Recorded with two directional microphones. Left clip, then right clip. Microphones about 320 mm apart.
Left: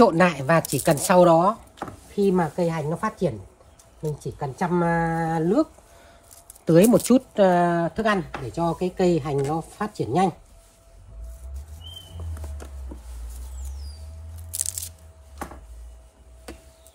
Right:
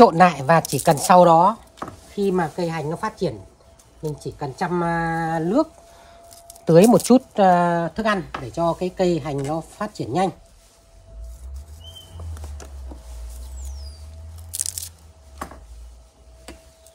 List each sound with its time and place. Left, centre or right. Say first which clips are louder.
0.0 s speech: right 5 dB; centre
2.3 s speech: even; centre
5.3 s speech: right 1 dB; centre
14.5 s crunch: right 2 dB; centre